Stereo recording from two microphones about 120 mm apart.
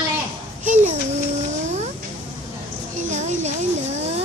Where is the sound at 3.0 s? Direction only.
75° right (ahead or behind).